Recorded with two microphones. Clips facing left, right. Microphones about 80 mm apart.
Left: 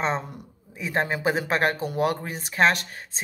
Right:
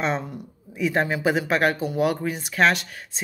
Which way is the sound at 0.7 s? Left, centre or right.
Left.